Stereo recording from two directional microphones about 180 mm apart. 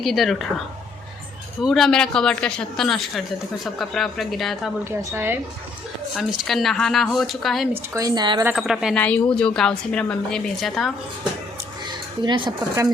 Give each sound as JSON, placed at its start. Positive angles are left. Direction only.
{"t": 0.0, "sound": "speech", "side_deg": 0}
{"t": 1.6, "sound": "speech", "side_deg": 0}
{"t": 4.9, "sound": "a woman's voice", "side_deg": -10}
{"t": 6.1, "sound": "speech", "side_deg": 0}
{"t": 7.7, "sound": "speech", "side_deg": -20}
{"t": 8.5, "sound": "speech", "side_deg": 0}
{"t": 9.0, "sound": "speech", "side_deg": 10}
{"t": 11.9, "sound": "speech", "side_deg": -25}